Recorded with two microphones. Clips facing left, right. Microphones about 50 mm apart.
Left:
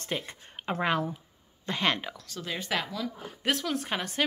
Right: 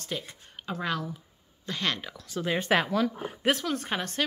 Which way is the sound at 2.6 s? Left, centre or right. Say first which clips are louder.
Right 7 dB; right.